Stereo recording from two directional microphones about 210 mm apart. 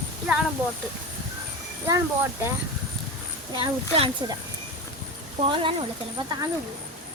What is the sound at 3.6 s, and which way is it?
Speech, 25° right (ahead or behind).